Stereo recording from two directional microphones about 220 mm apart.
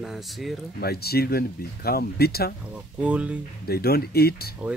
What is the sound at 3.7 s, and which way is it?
Speech, 45° left (ahead or behind).